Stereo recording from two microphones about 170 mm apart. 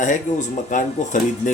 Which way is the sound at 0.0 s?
45° left (ahead or behind).